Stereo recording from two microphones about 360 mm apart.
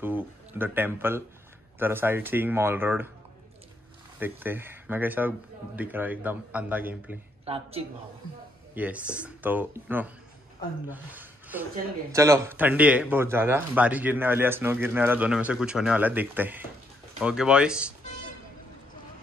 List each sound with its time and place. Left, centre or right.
0.0 s speech: centre
4.2 s speech: centre
7.4 s speech: centre
8.7 s speech: centre